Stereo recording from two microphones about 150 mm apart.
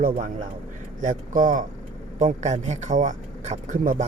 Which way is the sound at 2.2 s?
50° right (ahead or behind).